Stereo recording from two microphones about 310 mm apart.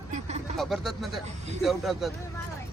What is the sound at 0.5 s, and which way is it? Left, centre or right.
Speech, centre.